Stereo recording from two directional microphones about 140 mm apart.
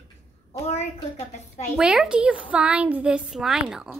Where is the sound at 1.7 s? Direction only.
5° right (ahead or behind).